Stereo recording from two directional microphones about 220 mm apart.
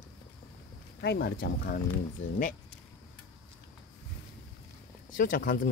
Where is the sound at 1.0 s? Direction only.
50° left (ahead or behind).